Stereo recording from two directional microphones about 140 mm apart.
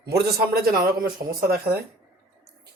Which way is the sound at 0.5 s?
90° right.